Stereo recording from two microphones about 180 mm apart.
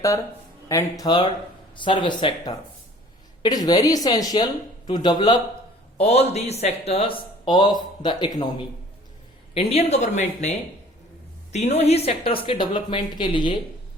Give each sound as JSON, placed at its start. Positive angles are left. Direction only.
{"t": 0.7, "sound": "speech", "side_deg": 20}
{"t": 6.0, "sound": "a man's voice", "side_deg": 35}
{"t": 9.6, "sound": "a man's voice", "side_deg": 35}
{"t": 11.5, "sound": "speech", "side_deg": 40}